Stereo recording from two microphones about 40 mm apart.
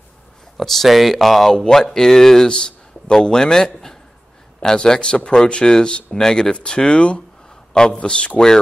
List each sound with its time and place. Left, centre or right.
0.6 s a man's voice: centre; by 8.4 s left